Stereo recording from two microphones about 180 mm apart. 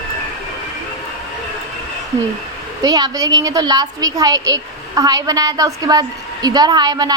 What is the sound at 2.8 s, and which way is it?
A woman's voice, 20° right (ahead or behind).